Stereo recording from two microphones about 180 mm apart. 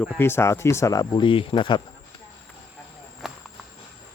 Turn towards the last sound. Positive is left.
turn(degrees=0)  # may be behind; listen again after turning